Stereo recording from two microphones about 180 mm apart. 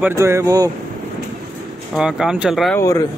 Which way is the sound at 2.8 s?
15° left (ahead or behind).